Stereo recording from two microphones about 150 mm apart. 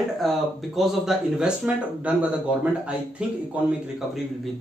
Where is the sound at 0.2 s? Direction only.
Centre (ahead or behind).